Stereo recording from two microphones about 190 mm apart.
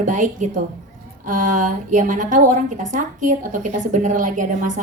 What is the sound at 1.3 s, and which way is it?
A woman's voice, 45° right (ahead or behind).